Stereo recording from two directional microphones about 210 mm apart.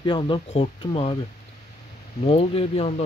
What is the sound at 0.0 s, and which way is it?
Speech, 25° left (ahead or behind).